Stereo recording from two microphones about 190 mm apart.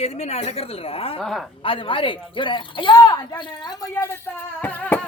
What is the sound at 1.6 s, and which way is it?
Speech, 25° left (ahead or behind).